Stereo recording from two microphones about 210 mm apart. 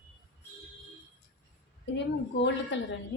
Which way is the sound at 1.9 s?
60° left (ahead or behind).